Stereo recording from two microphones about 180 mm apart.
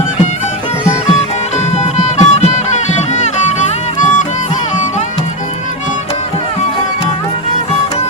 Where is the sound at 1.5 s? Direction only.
40° left (ahead or behind).